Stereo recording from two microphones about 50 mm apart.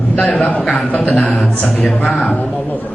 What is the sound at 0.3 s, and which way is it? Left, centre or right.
Speech, left.